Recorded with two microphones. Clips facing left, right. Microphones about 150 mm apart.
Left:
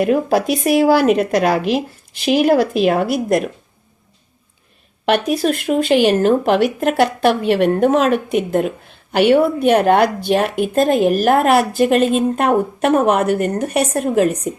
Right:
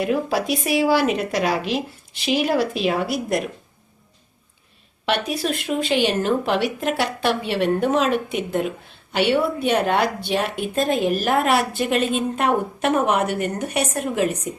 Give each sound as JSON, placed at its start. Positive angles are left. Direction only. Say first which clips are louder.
{"t": 0.0, "sound": "speech", "louder": "left 6 dB", "side_deg": 50}
{"t": 5.0, "sound": "speech", "louder": "left 7 dB", "side_deg": 50}